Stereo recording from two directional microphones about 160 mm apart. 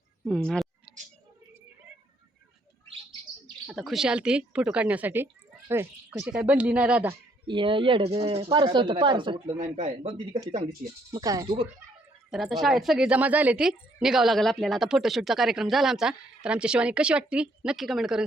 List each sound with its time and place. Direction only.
0.3 s a woman's voice: 5° left (ahead or behind)
3.4 s speech: centre (ahead or behind)
7.4 s speech: 30° right (ahead or behind)
9.6 s speech: 50° right (ahead or behind)
11.1 s speech: 20° right (ahead or behind)
12.3 s a woman's voice: centre (ahead or behind)